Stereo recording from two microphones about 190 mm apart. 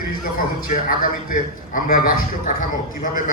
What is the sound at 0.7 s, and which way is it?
A man's voice, 45° left (ahead or behind).